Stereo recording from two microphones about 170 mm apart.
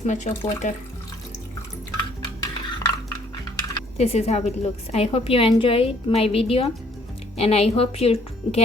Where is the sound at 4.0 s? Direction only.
40° left (ahead or behind).